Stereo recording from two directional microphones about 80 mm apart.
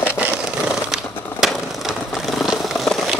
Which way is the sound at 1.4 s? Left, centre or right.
Centre.